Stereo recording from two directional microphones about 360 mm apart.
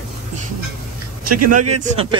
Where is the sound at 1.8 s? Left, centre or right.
Centre.